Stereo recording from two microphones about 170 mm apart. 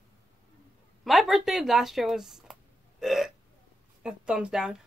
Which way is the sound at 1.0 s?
Centre (ahead or behind).